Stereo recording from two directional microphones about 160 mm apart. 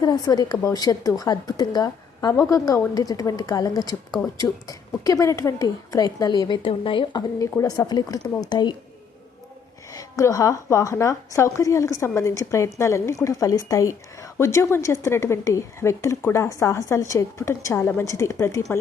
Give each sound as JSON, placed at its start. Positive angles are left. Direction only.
{"t": 0.0, "sound": "a woman's voice", "side_deg": 25}
{"t": 5.0, "sound": "a woman's voice", "side_deg": 20}
{"t": 9.9, "sound": "a woman's voice", "side_deg": 20}